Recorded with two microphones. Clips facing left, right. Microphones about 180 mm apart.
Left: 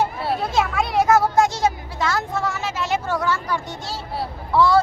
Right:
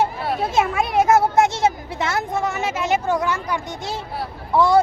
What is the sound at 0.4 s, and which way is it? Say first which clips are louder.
A man's voice: right 3 dB; 20° right (ahead or behind).